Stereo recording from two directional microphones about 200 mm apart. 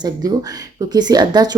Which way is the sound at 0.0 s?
20° right (ahead or behind).